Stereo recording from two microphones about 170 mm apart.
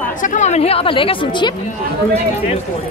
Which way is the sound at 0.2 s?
45° left (ahead or behind).